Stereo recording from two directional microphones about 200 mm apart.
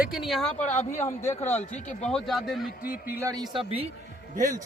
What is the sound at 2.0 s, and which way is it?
Speech, centre (ahead or behind).